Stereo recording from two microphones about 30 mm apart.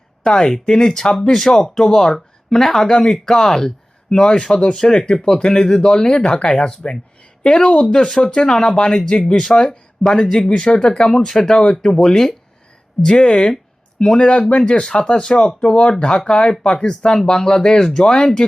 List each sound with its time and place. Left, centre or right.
0.3 s speech: left
0.9 s speech: centre
4.1 s speech: left
8.4 s speech: centre
14.2 s speech: left